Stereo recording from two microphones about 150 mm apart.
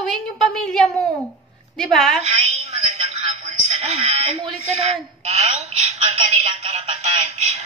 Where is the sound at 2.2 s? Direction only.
45° right (ahead or behind).